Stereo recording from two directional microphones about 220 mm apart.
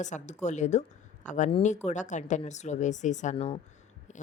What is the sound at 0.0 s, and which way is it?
Speech, 35° left (ahead or behind).